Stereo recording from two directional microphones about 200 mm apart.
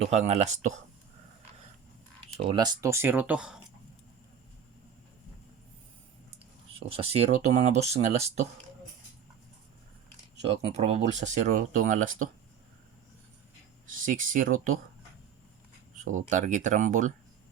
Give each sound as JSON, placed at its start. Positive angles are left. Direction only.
{"t": 0.0, "sound": "speech", "side_deg": -35}
{"t": 2.4, "sound": "speech", "side_deg": -20}
{"t": 6.7, "sound": "speech", "side_deg": -30}
{"t": 10.7, "sound": "speech", "side_deg": -30}
{"t": 13.8, "sound": "speech", "side_deg": -40}
{"t": 16.0, "sound": "speech", "side_deg": -40}